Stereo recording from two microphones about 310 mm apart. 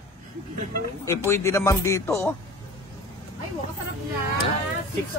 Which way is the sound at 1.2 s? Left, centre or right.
Centre.